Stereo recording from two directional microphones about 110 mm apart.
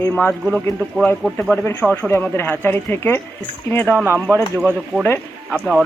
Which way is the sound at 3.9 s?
20° right (ahead or behind).